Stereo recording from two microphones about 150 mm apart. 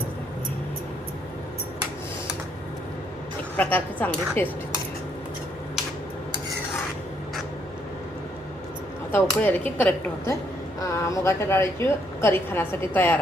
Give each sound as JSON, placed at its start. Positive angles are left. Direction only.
{"t": 3.6, "sound": "a woman's voice", "side_deg": 10}
{"t": 9.1, "sound": "a woman's voice", "side_deg": 15}